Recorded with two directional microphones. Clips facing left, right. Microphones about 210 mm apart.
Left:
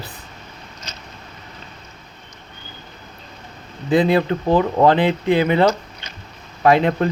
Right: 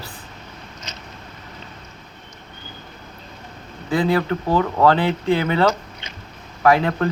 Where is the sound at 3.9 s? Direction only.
20° left (ahead or behind).